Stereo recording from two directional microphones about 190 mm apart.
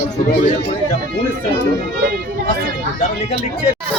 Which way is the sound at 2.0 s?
55° right (ahead or behind).